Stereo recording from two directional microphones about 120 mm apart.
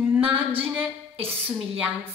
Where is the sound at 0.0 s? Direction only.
15° right (ahead or behind).